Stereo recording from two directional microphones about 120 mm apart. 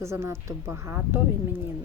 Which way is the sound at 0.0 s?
25° right (ahead or behind).